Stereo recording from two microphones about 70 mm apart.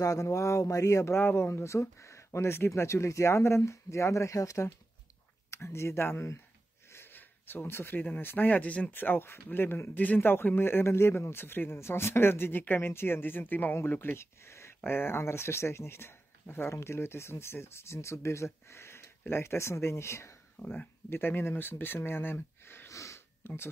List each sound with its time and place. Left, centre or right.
0.0 s speech: left
5.5 s speech: left; by 8.9 s centre
8.9 s speech: left
20.5 s speech: left
22.8 s a sound: left